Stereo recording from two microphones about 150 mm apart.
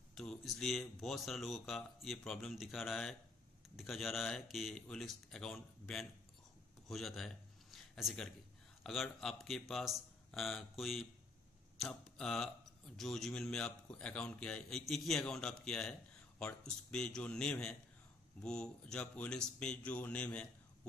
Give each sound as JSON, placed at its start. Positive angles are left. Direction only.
{"t": 0.1, "sound": "speech", "side_deg": 5}
{"t": 6.9, "sound": "a sound", "side_deg": 0}
{"t": 8.8, "sound": "speech", "side_deg": 0}